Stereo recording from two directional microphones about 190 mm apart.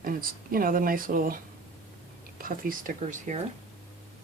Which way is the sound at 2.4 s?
45° right (ahead or behind).